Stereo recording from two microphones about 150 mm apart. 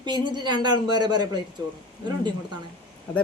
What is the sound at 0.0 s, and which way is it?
Speech, 30° right (ahead or behind).